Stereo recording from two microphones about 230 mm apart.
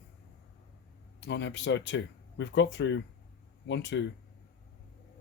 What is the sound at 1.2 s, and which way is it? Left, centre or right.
Speech, left.